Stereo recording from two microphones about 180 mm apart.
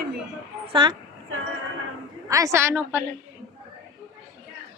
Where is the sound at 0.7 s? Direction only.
25° right (ahead or behind).